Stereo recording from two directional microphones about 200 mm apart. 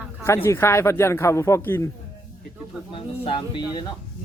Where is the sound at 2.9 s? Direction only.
25° left (ahead or behind).